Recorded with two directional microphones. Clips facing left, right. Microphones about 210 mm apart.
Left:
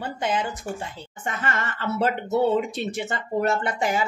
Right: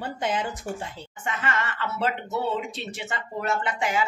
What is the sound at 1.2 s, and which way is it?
A woman's voice, 45° left (ahead or behind).